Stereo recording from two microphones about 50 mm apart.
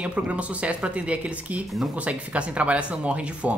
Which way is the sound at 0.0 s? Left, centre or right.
Right.